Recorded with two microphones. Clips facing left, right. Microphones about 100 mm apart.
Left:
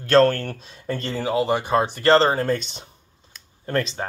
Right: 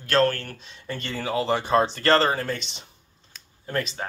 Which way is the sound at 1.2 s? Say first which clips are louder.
Left 2 dB; 20° left (ahead or behind).